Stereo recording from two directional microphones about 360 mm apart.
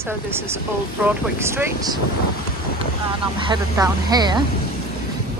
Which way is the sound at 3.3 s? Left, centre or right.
Centre.